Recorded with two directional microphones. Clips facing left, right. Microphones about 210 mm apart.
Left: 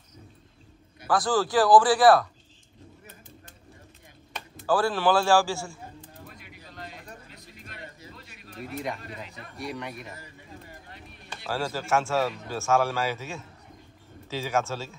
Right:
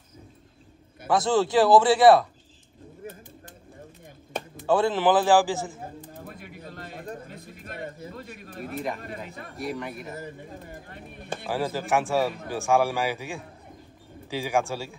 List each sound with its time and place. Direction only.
1.0 s a man's voice: 25° right (ahead or behind)
4.6 s a man's voice: 20° right (ahead or behind)
6.2 s a sound: 50° right (ahead or behind)
9.0 s speech: 50° right (ahead or behind)
9.6 s speech: centre (ahead or behind)
10.1 s bird: 50° right (ahead or behind)
11.4 s a man's voice: 15° right (ahead or behind)